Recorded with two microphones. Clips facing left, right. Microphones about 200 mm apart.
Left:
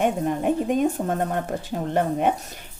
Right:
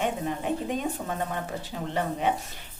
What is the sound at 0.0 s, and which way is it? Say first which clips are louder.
Speech: left 7 dB; 50° left (ahead or behind).